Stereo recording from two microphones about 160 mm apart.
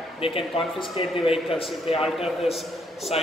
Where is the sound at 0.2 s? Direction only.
35° left (ahead or behind).